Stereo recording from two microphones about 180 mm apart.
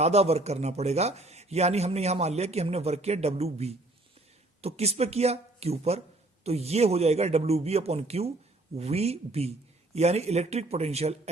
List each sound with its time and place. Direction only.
0.0 s a man's voice: 35° right (ahead or behind)